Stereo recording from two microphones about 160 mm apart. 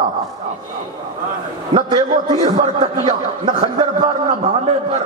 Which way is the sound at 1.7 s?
30° right (ahead or behind).